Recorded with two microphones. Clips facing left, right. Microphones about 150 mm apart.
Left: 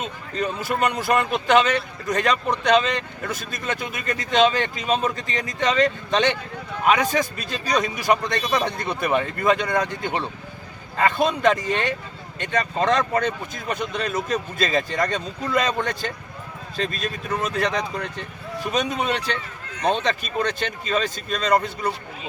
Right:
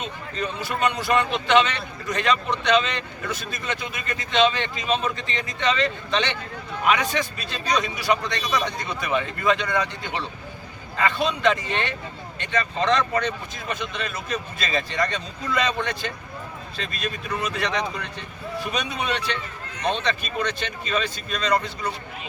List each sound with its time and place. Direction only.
0.0 s speech: 45° left (ahead or behind)